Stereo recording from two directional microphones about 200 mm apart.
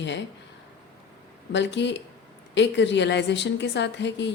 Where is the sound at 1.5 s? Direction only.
65° left (ahead or behind).